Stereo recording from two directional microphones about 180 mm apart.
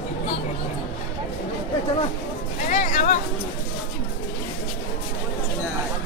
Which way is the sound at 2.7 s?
45° left (ahead or behind).